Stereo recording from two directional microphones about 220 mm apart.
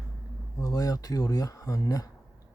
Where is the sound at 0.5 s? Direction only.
15° left (ahead or behind).